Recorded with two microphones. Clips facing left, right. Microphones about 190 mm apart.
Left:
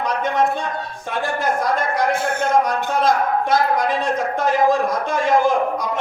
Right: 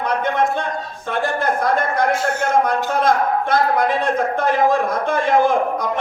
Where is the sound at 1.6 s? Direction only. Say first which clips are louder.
Right 3 dB; 55° right (ahead or behind).